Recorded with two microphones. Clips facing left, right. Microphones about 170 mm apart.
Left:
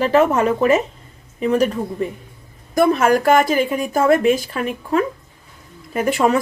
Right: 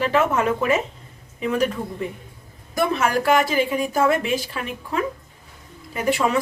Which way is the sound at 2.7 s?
45° left (ahead or behind).